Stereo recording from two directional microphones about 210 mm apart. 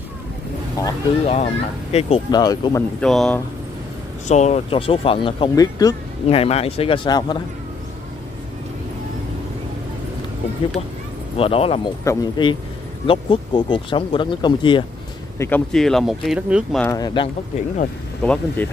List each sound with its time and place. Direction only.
0.8 s speech: 20° left (ahead or behind)
1.2 s speech: 30° left (ahead or behind)
3.0 s speech: centre (ahead or behind)
4.3 s speech: 35° left (ahead or behind); by 5.9 s 15° left (ahead or behind)
6.2 s speech: 30° left (ahead or behind)
11.3 s speech: 25° left (ahead or behind)
12.0 s speech: 15° left (ahead or behind)
15.3 s speech: 10° left (ahead or behind)
15.7 s speech: centre (ahead or behind)
16.8 s speech: 15° left (ahead or behind)
18.2 s speech: 5° left (ahead or behind)